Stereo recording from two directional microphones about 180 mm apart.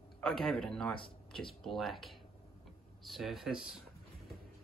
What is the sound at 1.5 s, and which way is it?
Speech, centre (ahead or behind).